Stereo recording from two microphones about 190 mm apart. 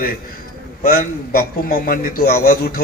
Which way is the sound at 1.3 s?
50° left (ahead or behind).